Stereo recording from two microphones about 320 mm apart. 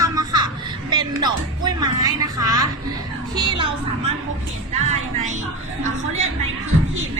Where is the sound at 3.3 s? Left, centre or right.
Centre.